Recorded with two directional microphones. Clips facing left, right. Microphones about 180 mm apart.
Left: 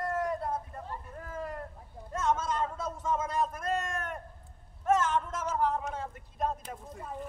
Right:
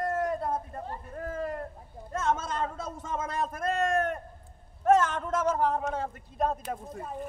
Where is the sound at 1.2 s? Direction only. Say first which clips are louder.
Right 7 dB; 65° right (ahead or behind).